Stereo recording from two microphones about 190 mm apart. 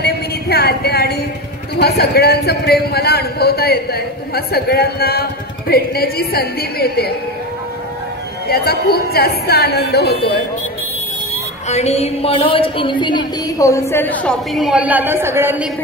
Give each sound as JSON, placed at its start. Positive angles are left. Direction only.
{"t": 0.0, "sound": "a sound", "side_deg": 60}
{"t": 1.8, "sound": "a man's voice", "side_deg": 55}
{"t": 8.5, "sound": "a man's voice", "side_deg": 55}
{"t": 11.7, "sound": "a woman's voice", "side_deg": 35}